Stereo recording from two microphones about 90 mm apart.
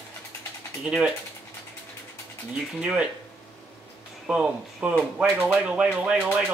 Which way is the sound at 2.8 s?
10° right (ahead or behind).